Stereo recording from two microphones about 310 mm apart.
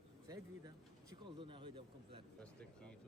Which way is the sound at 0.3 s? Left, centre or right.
Centre.